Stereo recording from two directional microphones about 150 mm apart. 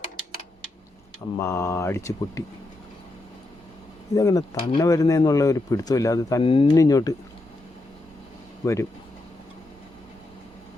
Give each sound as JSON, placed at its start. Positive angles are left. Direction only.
{"t": 1.4, "sound": "speech", "side_deg": 15}
{"t": 4.1, "sound": "speech", "side_deg": 20}
{"t": 6.4, "sound": "speech", "side_deg": 35}
{"t": 6.7, "sound": "speech", "side_deg": 25}
{"t": 8.6, "sound": "speech", "side_deg": 20}